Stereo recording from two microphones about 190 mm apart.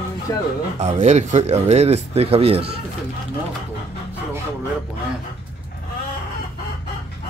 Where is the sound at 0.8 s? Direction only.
35° right (ahead or behind).